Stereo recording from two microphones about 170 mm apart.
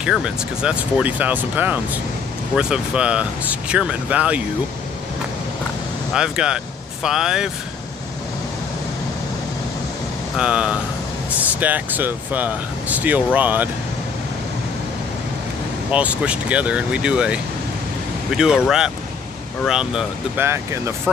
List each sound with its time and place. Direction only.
0.0 s speech: 5° right (ahead or behind)
6.1 s speech: 5° right (ahead or behind)
10.3 s speech: 5° right (ahead or behind)
15.9 s speech: 5° right (ahead or behind)
20.4 s speech: 15° right (ahead or behind)